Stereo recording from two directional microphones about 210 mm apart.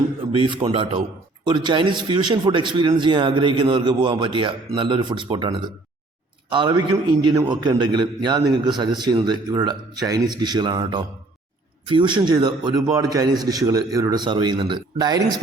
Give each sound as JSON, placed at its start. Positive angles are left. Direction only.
{"t": 0.3, "sound": "a man's voice", "side_deg": -25}